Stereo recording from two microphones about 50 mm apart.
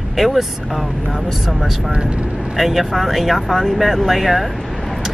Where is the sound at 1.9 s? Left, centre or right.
Right.